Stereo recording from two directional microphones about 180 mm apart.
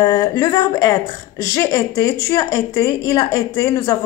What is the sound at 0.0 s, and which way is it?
Speech, 20° left (ahead or behind).